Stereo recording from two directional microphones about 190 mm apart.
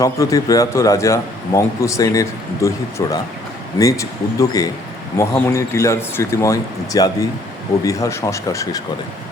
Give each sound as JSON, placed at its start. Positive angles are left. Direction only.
{"t": 0.0, "sound": "a man's voice", "side_deg": 20}